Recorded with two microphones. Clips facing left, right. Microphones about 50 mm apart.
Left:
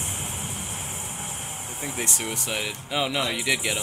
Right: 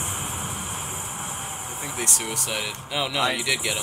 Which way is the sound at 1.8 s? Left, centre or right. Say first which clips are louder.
Even; centre.